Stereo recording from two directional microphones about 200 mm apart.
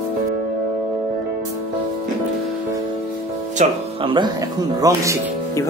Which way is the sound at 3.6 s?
25° right (ahead or behind).